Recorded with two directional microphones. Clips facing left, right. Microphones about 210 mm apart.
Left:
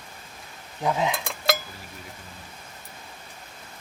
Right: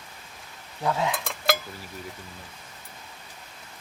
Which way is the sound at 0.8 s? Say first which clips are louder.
Left 1 dB; 20° left (ahead or behind).